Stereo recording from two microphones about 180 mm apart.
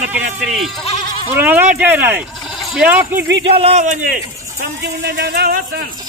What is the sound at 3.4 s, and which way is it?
Speech, 35° right (ahead or behind).